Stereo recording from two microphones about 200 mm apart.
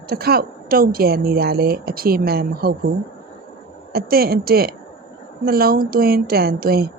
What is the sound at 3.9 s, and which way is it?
A woman's voice, 50° right (ahead or behind).